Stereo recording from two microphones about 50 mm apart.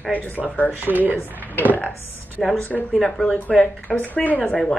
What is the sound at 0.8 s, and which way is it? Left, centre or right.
Speech, right.